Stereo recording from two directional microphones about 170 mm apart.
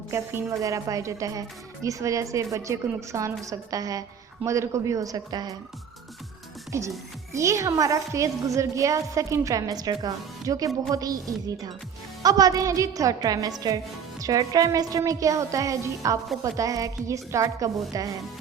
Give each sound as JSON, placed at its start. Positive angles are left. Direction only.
{"t": 0.1, "sound": "speech", "side_deg": -15}
{"t": 6.7, "sound": "music", "side_deg": -20}
{"t": 7.3, "sound": "speech", "side_deg": -15}